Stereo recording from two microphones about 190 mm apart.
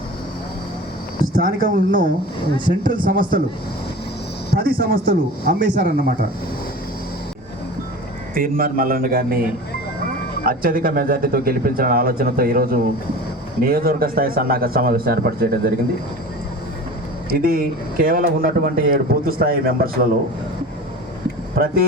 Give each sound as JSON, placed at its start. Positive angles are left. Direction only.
{"t": 1.4, "sound": "speech", "side_deg": -45}
{"t": 4.5, "sound": "speech", "side_deg": -50}
{"t": 8.4, "sound": "speech", "side_deg": -50}
{"t": 10.4, "sound": "speech", "side_deg": -50}
{"t": 17.2, "sound": "speech", "side_deg": -50}
{"t": 21.6, "sound": "speech", "side_deg": -50}